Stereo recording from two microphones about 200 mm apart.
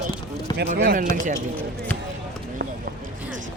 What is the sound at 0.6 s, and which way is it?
Speech, 55° right (ahead or behind).